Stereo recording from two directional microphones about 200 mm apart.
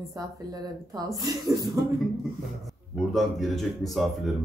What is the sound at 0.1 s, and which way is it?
Speech, 20° right (ahead or behind).